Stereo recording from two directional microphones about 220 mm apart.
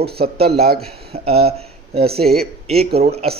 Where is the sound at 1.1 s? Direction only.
30° right (ahead or behind).